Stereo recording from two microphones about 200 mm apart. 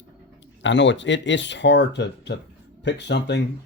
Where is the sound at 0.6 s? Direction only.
65° left (ahead or behind).